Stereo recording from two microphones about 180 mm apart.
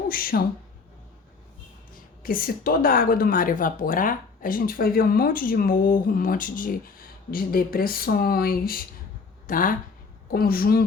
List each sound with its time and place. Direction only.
0.1 s speech: 55° left (ahead or behind)
2.2 s a woman's voice: 55° left (ahead or behind)